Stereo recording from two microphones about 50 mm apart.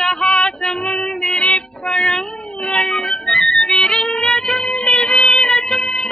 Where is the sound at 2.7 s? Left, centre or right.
Centre.